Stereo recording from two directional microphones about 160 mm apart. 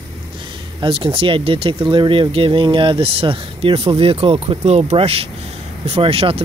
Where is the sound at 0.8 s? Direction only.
35° right (ahead or behind).